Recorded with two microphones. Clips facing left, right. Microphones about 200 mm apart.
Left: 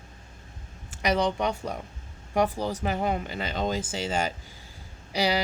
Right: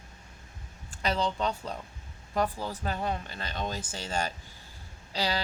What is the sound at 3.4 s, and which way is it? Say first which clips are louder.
Speech: left 6 dB; 90° left.